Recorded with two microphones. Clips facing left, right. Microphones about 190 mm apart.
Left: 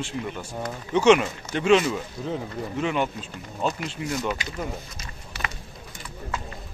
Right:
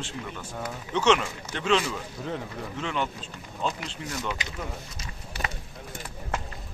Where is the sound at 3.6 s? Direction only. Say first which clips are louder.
Left 4 dB; 15° left (ahead or behind).